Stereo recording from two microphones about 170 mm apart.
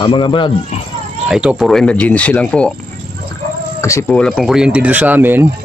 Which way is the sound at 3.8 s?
15° left (ahead or behind).